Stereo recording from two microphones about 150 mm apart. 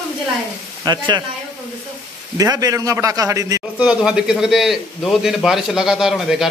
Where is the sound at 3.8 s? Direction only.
5° right (ahead or behind).